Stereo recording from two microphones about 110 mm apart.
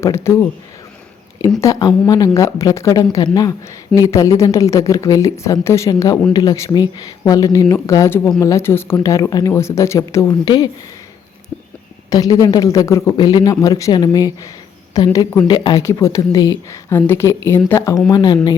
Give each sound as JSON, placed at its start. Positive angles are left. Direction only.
{"t": 0.0, "sound": "speech", "side_deg": 25}
{"t": 1.6, "sound": "speech", "side_deg": 35}
{"t": 12.1, "sound": "speech", "side_deg": 35}
{"t": 13.1, "sound": "speech", "side_deg": 40}
{"t": 15.8, "sound": "speech", "side_deg": 25}
{"t": 16.9, "sound": "speech", "side_deg": 20}
{"t": 18.1, "sound": "speech", "side_deg": 40}